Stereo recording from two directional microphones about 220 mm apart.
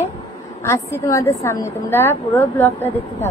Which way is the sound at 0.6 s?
10° left (ahead or behind).